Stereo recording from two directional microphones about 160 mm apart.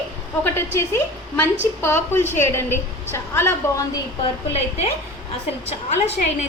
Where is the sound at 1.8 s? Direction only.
15° left (ahead or behind).